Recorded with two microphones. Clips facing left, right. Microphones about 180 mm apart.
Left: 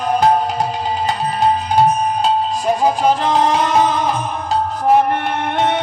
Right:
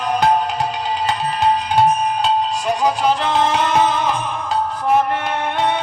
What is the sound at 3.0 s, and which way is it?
Music, 40° left (ahead or behind).